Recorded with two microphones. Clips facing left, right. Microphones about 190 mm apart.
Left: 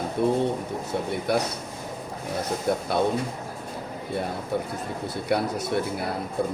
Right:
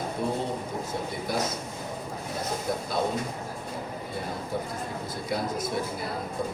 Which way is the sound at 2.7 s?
65° left (ahead or behind).